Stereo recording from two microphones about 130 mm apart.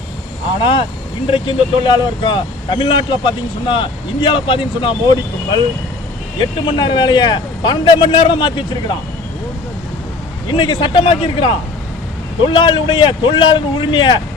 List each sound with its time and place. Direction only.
0.6 s speech: 40° left (ahead or behind)
10.5 s speech: 35° left (ahead or behind)